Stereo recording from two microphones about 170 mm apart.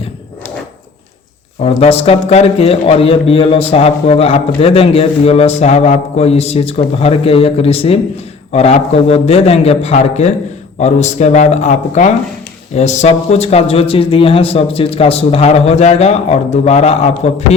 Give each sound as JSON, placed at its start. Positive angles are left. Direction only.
{"t": 1.6, "sound": "a man's voice", "side_deg": 35}